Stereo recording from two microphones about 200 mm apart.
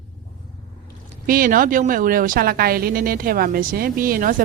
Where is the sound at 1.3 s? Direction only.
45° right (ahead or behind).